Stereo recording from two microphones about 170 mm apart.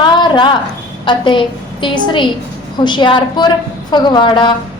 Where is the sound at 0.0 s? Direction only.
30° left (ahead or behind).